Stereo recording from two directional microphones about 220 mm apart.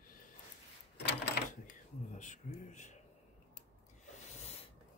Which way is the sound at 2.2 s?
35° left (ahead or behind).